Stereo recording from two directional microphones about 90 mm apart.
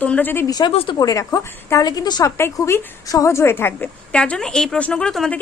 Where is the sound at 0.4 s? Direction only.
50° left (ahead or behind).